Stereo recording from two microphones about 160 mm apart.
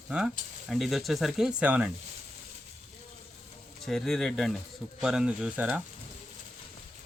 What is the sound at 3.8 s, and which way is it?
Speech, centre (ahead or behind).